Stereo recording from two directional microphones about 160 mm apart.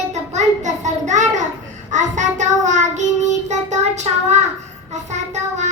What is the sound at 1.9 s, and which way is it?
Child singing, 50° right (ahead or behind).